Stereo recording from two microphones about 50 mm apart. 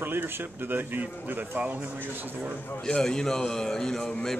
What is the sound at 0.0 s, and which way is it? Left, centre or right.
Speech, right.